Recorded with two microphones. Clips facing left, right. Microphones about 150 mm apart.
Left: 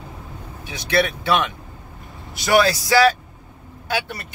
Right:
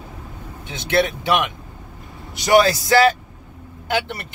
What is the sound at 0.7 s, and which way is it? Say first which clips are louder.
Speech: right 1 dB; 20° right (ahead or behind).